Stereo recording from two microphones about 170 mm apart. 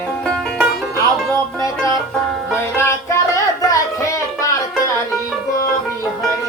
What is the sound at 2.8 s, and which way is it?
Music, 15° left (ahead or behind).